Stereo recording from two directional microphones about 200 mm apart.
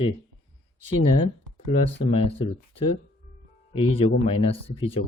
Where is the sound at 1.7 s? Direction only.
35° left (ahead or behind).